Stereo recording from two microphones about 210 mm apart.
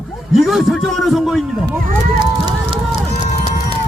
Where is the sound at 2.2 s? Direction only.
20° right (ahead or behind).